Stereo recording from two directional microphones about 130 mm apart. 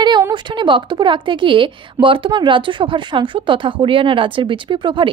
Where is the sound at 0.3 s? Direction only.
35° right (ahead or behind).